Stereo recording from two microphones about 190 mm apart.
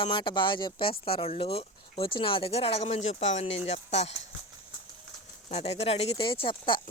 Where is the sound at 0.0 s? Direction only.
25° left (ahead or behind).